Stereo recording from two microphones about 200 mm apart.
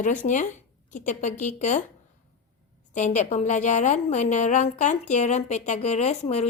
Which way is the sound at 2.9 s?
35° left (ahead or behind).